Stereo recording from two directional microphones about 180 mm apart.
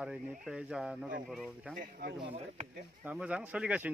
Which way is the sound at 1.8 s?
50° right (ahead or behind).